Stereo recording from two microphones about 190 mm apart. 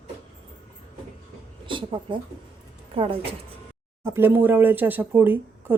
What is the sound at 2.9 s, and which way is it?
Speech, 30° right (ahead or behind).